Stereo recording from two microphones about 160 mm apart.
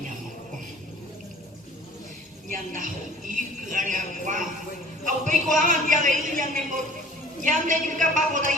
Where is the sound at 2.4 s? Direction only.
55° right (ahead or behind).